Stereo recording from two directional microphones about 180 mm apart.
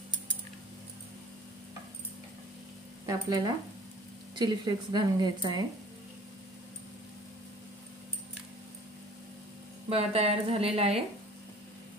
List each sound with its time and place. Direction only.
3.1 s a woman's voice: 20° right (ahead or behind)
9.8 s a woman's voice: 35° right (ahead or behind)